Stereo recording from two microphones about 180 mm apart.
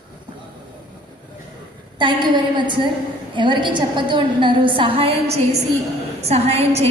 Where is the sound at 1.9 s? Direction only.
25° right (ahead or behind).